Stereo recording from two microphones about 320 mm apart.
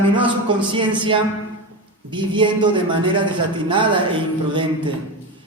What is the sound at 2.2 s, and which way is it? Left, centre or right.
Speech, centre.